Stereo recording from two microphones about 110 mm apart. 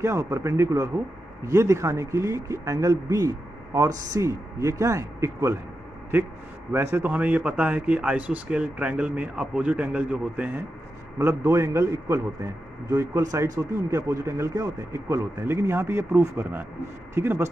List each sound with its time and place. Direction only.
0.0 s a man's voice: 25° right (ahead or behind)
6.7 s speech: 20° right (ahead or behind)
11.1 s a man's voice: 25° right (ahead or behind)